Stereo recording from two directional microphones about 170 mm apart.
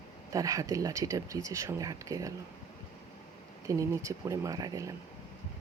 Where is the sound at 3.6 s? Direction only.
20° right (ahead or behind).